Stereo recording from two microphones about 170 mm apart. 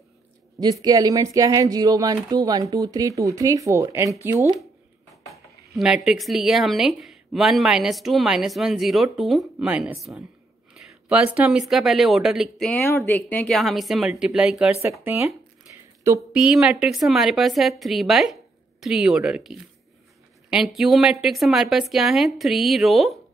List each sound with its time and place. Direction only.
0.6 s speech: 20° right (ahead or behind)
5.8 s speech: 5° right (ahead or behind)
12.8 s speech: 15° left (ahead or behind); by 15.3 s 15° right (ahead or behind)
15.7 s a sound: 10° right (ahead or behind)
16.3 s speech: 5° right (ahead or behind)